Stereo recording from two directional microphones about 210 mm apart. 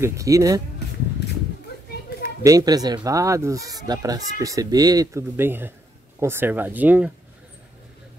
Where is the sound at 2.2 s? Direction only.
15° right (ahead or behind).